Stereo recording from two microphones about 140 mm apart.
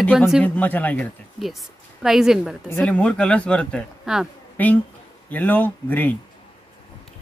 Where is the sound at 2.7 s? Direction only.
10° left (ahead or behind).